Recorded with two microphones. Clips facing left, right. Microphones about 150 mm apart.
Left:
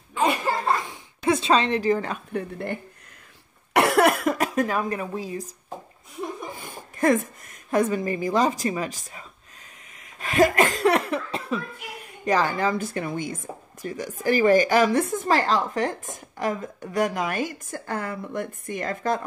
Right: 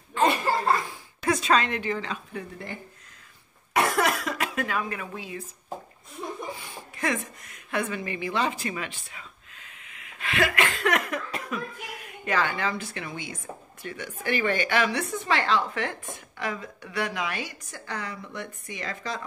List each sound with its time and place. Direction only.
0.1 s laughter: 10° left (ahead or behind)
0.8 s speech: 25° left (ahead or behind); by 2.8 s 60° left (ahead or behind)
3.7 s cough: 70° left (ahead or behind); by 5.5 s 35° left (ahead or behind)
6.5 s a sound: 45° left (ahead or behind); by 11.6 s 30° left (ahead or behind)
12.3 s a woman's voice: 40° left (ahead or behind)